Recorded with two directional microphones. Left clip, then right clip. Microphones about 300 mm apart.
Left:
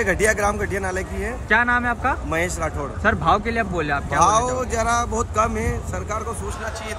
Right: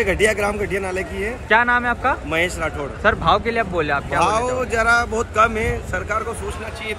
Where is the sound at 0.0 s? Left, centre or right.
Left.